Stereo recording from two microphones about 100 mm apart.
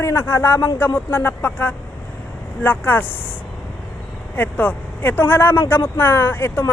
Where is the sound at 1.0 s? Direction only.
20° left (ahead or behind).